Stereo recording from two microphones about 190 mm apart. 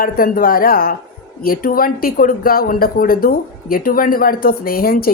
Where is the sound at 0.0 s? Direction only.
50° left (ahead or behind).